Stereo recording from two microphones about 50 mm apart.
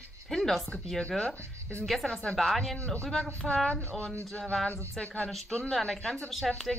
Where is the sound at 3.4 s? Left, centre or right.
Centre.